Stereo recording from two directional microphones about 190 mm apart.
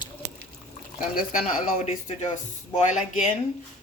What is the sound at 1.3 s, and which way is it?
Speech, 40° left (ahead or behind).